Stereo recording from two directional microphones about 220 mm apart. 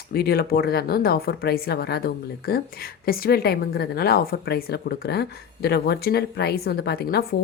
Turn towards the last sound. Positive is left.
turn(degrees=45)  # may be behind; listen again after turning